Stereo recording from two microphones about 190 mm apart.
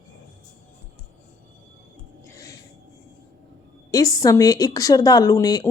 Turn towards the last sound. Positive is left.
turn(degrees=20)  # may be behind; listen again after turning